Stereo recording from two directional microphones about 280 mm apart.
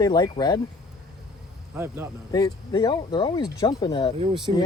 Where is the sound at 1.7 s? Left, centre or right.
Centre.